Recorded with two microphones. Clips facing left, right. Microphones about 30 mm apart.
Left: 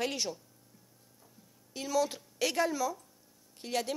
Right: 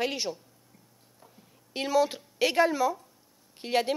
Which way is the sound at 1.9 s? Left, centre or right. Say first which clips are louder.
Right 5 dB; right.